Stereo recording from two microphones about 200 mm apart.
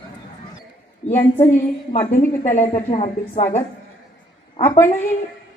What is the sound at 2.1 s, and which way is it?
A woman's voice, 40° left (ahead or behind).